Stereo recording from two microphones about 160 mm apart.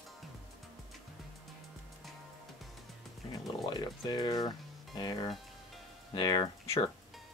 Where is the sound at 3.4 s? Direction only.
25° left (ahead or behind).